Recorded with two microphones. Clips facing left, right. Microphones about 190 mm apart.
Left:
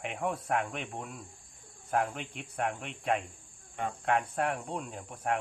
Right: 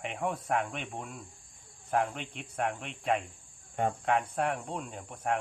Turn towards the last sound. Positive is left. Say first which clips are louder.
# even
turn(degrees=0)  # may be behind; listen again after turning